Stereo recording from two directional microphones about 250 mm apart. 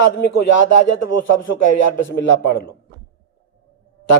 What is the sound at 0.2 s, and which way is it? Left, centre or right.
A man's voice, left.